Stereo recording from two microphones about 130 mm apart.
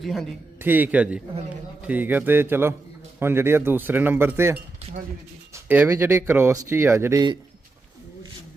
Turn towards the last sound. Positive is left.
turn(degrees=-20)  # may be behind; listen again after turning